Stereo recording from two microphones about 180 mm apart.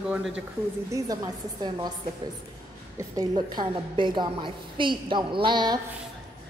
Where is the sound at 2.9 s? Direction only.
20° right (ahead or behind).